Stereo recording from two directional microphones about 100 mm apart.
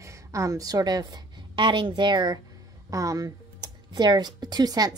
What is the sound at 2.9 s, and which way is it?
Speech, 35° right (ahead or behind).